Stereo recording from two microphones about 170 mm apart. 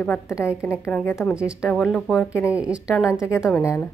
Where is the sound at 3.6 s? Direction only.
15° left (ahead or behind).